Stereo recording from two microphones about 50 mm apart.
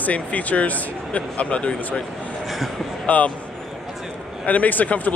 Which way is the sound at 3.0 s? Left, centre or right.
Left.